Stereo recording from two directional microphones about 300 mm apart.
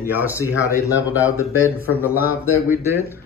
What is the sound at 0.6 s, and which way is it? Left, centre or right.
Speech, centre.